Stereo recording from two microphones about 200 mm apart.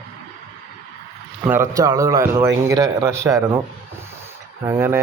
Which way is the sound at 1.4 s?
10° right (ahead or behind).